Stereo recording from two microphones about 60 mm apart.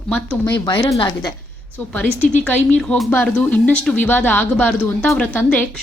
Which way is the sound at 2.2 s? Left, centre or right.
Left.